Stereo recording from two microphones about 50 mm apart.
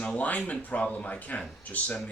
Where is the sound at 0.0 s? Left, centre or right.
Left.